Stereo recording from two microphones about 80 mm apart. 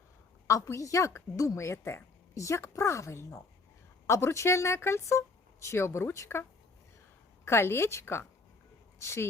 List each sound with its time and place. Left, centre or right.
0.4 s a woman's voice: left
7.4 s a woman's voice: left